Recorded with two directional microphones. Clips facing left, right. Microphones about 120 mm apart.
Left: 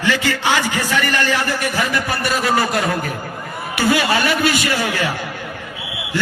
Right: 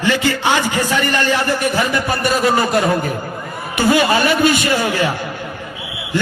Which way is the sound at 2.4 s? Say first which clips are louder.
Right 2 dB; 25° right (ahead or behind).